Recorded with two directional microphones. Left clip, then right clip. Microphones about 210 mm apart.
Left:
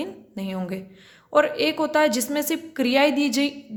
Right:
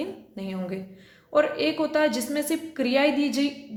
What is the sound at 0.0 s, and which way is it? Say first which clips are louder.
A woman's voice: left 1 dB; 25° left (ahead or behind).